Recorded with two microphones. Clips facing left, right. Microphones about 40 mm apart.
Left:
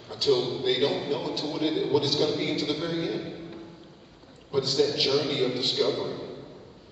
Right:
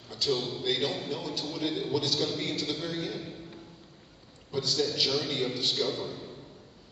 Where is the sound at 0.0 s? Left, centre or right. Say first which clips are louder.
Left 6 dB; centre.